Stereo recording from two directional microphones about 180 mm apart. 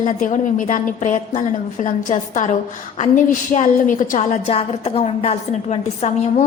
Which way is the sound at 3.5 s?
45° left (ahead or behind).